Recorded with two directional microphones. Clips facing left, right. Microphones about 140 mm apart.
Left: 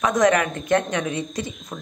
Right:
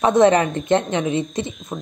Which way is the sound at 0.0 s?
30° right (ahead or behind).